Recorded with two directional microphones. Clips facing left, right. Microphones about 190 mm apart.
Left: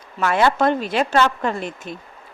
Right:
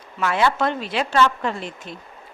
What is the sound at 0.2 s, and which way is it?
A woman's voice, 50° left (ahead or behind).